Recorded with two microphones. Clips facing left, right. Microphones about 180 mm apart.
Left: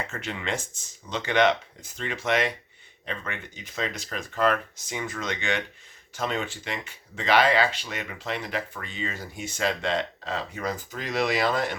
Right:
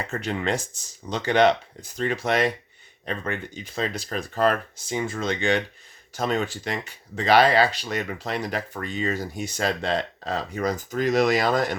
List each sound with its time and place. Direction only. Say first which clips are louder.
0.1 s speech: right 5 dB; 35° right (ahead or behind)